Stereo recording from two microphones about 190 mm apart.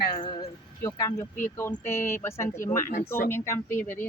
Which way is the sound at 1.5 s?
15° left (ahead or behind).